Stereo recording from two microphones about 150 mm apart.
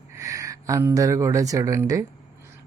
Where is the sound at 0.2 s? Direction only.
20° right (ahead or behind).